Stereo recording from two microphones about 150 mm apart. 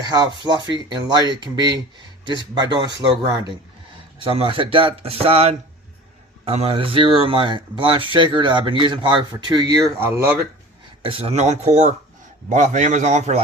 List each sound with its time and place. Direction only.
0.0 s speech: 25° right (ahead or behind)
4.2 s speech: 40° right (ahead or behind); by 10.3 s 15° right (ahead or behind)
11.0 s speech: 40° right (ahead or behind)